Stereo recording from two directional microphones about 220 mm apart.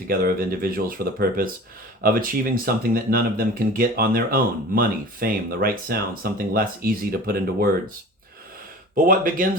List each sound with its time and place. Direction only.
0.1 s speech: 40° right (ahead or behind)
9.0 s speech: 40° right (ahead or behind)